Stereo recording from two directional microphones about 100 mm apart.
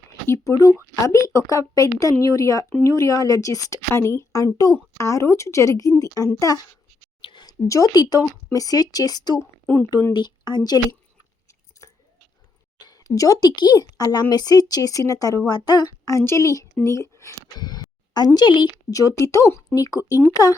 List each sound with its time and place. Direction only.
0.3 s a woman's voice: 30° left (ahead or behind)
7.2 s a sound: 55° left (ahead or behind)
7.7 s a woman's voice: 35° left (ahead or behind)
9.4 s a sound: 25° left (ahead or behind)
10.1 s speech: 45° left (ahead or behind)
12.8 s a woman's voice: 35° left (ahead or behind)
17.6 s a sound: 45° left (ahead or behind)
18.3 s speech: 50° left (ahead or behind)
18.9 s a woman's voice: 35° left (ahead or behind)